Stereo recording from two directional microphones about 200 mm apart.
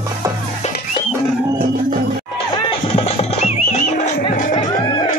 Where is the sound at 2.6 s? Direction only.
30° left (ahead or behind).